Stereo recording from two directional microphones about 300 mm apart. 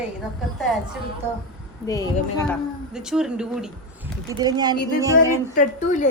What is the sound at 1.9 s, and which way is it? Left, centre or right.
Speech, centre.